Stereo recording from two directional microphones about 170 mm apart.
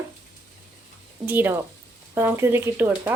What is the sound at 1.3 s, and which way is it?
A woman's voice, 10° right (ahead or behind).